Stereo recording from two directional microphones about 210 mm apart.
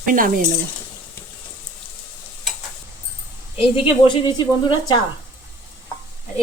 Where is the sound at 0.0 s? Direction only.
40° right (ahead or behind).